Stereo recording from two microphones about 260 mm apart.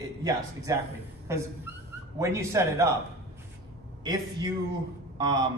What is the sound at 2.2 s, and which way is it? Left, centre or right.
Speech, centre.